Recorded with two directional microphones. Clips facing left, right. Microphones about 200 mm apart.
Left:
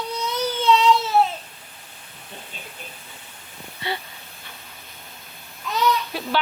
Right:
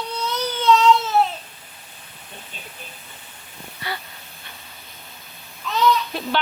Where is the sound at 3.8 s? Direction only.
25° left (ahead or behind).